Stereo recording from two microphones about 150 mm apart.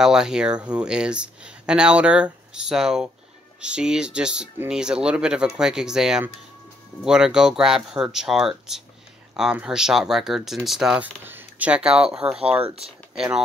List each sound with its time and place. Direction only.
0.0 s speech: 5° right (ahead or behind)
12.6 s speech: 40° right (ahead or behind)
13.1 s speech: 5° right (ahead or behind)